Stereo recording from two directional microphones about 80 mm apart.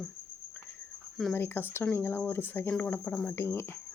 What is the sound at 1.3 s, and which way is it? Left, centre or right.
Speech, left.